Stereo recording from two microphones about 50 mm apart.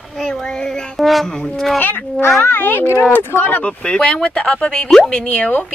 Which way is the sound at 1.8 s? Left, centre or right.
Left.